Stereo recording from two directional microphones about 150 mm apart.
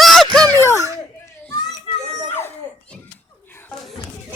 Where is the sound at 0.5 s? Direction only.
20° left (ahead or behind).